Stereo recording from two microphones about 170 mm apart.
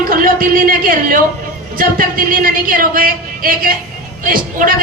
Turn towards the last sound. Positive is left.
turn(degrees=-55)  # may be behind; listen again after turning